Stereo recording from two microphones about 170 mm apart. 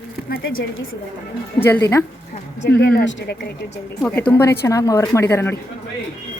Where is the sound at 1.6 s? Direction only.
10° left (ahead or behind).